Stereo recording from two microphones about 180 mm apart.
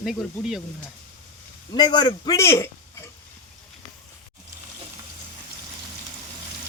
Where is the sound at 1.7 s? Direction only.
25° left (ahead or behind).